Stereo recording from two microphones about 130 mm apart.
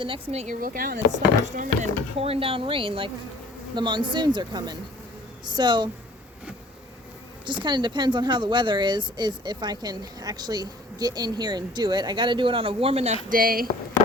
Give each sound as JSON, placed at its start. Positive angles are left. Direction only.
{"t": 0.0, "sound": "speech", "side_deg": -45}
{"t": 0.6, "sound": "speech", "side_deg": -90}
{"t": 2.1, "sound": "speech", "side_deg": -50}
{"t": 7.4, "sound": "speech", "side_deg": -35}
{"t": 13.3, "sound": "speech", "side_deg": -90}